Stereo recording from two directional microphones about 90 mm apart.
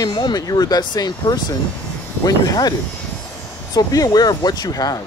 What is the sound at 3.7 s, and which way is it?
Speech, 45° left (ahead or behind).